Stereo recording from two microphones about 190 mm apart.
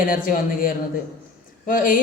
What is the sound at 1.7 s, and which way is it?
Speech, 45° left (ahead or behind).